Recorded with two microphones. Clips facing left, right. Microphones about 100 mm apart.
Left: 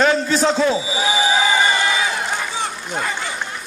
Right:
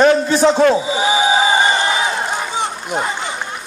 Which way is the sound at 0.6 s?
60° right (ahead or behind).